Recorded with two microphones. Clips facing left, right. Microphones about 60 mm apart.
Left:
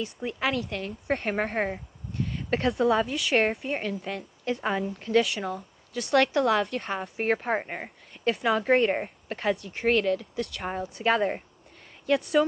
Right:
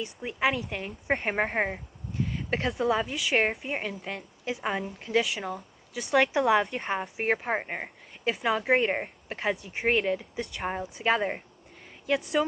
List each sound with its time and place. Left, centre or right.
0.0 s speech: centre
10.4 s speech: centre